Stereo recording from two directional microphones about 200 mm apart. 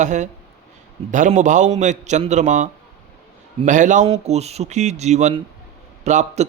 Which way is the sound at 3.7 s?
40° right (ahead or behind).